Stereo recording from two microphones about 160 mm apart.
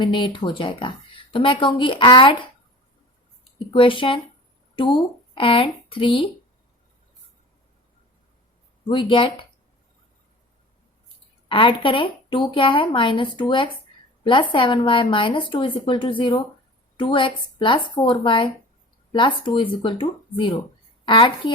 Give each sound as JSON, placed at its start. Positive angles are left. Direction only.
{"t": 0.0, "sound": "speech", "side_deg": 30}
{"t": 3.7, "sound": "speech", "side_deg": 30}
{"t": 5.3, "sound": "speech", "side_deg": 35}
{"t": 8.9, "sound": "speech", "side_deg": 30}
{"t": 11.4, "sound": "speech", "side_deg": 30}